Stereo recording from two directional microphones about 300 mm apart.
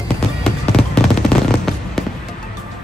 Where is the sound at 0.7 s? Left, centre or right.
Centre.